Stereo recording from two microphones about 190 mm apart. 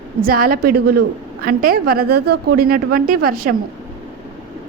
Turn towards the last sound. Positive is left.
turn(degrees=-50)  # may be behind; listen again after turning